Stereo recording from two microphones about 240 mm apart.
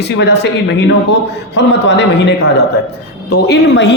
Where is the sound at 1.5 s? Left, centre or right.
Left.